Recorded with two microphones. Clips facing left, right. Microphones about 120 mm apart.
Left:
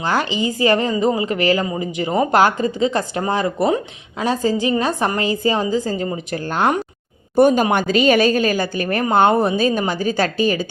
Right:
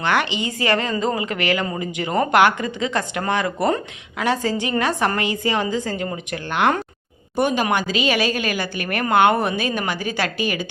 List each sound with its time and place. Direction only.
0.0 s a woman's voice: 30° left (ahead or behind)
9.6 s speech: 40° left (ahead or behind)